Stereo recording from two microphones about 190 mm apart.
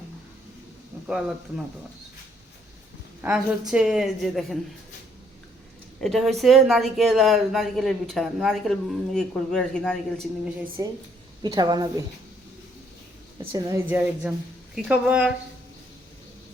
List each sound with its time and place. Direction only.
1.0 s speech: 5° right (ahead or behind)
3.2 s a woman's voice: 10° right (ahead or behind)
6.0 s speech: centre (ahead or behind)
11.4 s a woman's voice: 20° right (ahead or behind)
13.4 s a woman's voice: 15° right (ahead or behind)